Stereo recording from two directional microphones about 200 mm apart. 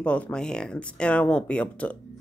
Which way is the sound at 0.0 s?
5° left (ahead or behind).